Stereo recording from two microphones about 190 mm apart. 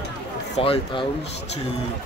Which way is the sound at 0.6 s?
30° left (ahead or behind).